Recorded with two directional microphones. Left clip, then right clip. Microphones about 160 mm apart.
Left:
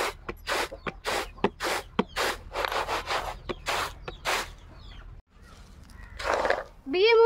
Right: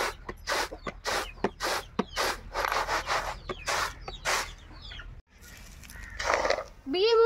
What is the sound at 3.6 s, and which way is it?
Chicken, 55° left (ahead or behind).